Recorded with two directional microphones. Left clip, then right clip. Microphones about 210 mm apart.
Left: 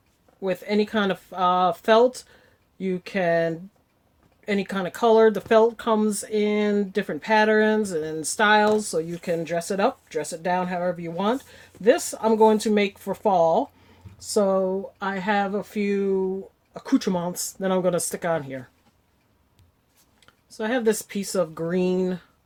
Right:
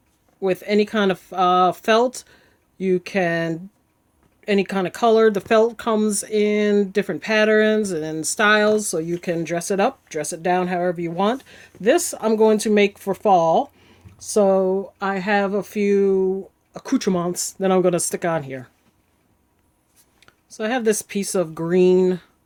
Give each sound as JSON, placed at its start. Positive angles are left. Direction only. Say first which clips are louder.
{"t": 0.4, "sound": "speech", "louder": "right 5 dB", "side_deg": -50}
{"t": 20.6, "sound": "speech", "louder": "right 2 dB", "side_deg": -45}